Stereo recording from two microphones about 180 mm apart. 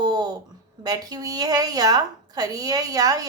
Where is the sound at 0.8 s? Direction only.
20° right (ahead or behind).